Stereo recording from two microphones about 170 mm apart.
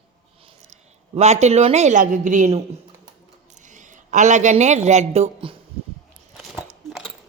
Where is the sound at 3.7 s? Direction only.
45° right (ahead or behind).